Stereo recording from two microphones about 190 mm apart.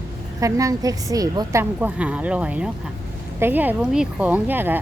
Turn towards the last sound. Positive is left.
turn(degrees=-10)  # may be behind; listen again after turning